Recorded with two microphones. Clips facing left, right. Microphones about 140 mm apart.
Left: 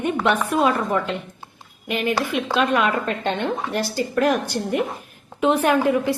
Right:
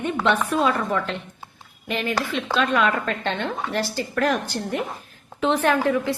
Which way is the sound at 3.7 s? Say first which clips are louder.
Left 3 dB; 15° left (ahead or behind).